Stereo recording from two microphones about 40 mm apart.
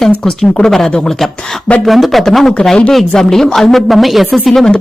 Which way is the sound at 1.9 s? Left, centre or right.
Centre.